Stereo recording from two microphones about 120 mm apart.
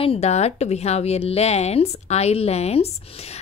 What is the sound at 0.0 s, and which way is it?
Speech, 60° left (ahead or behind).